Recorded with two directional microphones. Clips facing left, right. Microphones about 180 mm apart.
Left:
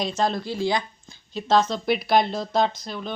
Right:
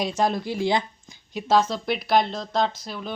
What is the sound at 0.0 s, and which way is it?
Speech, 15° right (ahead or behind).